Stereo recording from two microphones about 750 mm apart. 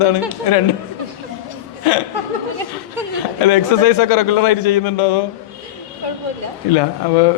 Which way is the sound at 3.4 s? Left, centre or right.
Left.